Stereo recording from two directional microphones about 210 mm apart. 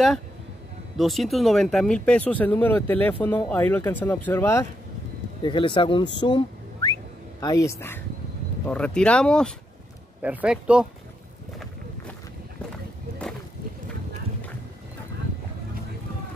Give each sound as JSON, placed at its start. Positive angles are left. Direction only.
{"t": 0.9, "sound": "speech", "side_deg": 0}
{"t": 5.4, "sound": "speech", "side_deg": 20}
{"t": 6.1, "sound": "a sound", "side_deg": 20}
{"t": 7.3, "sound": "speech", "side_deg": 15}